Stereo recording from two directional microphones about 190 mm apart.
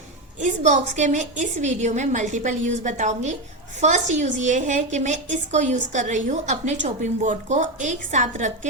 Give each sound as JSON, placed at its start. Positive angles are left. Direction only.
{"t": 0.3, "sound": "a woman's voice", "side_deg": -40}